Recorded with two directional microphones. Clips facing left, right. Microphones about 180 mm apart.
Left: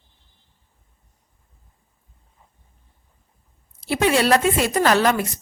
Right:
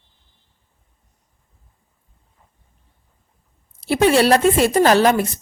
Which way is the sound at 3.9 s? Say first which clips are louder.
Right 4 dB; 35° right (ahead or behind).